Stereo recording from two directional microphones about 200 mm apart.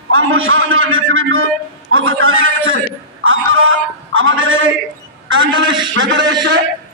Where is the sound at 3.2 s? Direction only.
90° right.